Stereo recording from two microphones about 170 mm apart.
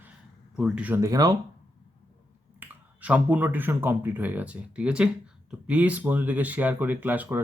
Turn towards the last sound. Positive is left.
turn(degrees=-10)  # may be behind; listen again after turning